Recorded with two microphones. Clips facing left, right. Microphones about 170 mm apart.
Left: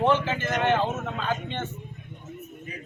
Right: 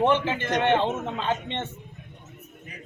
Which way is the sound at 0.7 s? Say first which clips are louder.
Right 2 dB; 25° right (ahead or behind).